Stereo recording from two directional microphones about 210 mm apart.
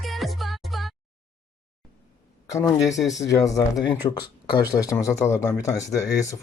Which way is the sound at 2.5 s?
15° left (ahead or behind).